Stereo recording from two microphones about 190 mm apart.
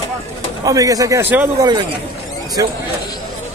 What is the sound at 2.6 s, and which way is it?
Speech, 20° right (ahead or behind).